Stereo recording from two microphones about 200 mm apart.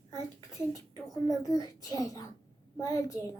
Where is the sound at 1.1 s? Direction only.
15° left (ahead or behind).